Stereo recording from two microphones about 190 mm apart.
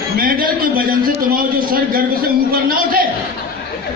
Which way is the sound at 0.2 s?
50° right (ahead or behind).